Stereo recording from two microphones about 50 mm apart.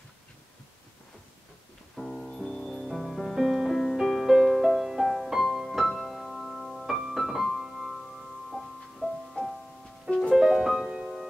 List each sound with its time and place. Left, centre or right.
2.0 s music: centre
10.0 s music: left
10.3 s music: centre